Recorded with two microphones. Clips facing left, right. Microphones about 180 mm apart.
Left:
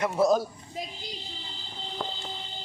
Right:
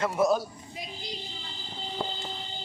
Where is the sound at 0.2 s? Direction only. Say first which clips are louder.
Left 2 dB; 35° left (ahead or behind).